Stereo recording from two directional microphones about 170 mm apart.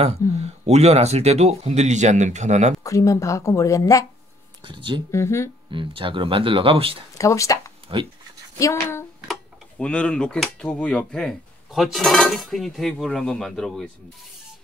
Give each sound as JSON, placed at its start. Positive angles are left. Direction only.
{"t": 0.4, "sound": "speech", "side_deg": -40}
{"t": 2.8, "sound": "speech", "side_deg": 20}
{"t": 4.6, "sound": "speech", "side_deg": -30}
{"t": 5.1, "sound": "a woman's voice", "side_deg": 15}
{"t": 5.7, "sound": "speech", "side_deg": -30}
{"t": 7.2, "sound": "a woman's voice", "side_deg": 20}
{"t": 9.3, "sound": "speech", "side_deg": 5}